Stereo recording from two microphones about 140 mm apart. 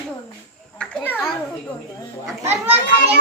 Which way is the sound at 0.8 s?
5° left (ahead or behind).